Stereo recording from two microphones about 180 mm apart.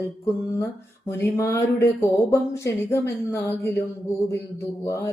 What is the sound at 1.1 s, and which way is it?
Speech, 15° left (ahead or behind).